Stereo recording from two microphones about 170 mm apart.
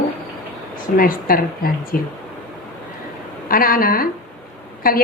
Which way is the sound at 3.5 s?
55° left (ahead or behind).